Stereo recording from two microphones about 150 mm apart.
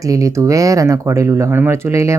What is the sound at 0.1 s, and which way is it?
Speech, 20° right (ahead or behind).